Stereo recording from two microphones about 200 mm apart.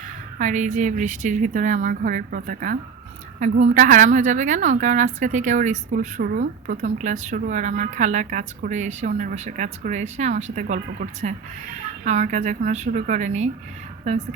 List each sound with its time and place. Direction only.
0.3 s a woman's voice: 35° right (ahead or behind)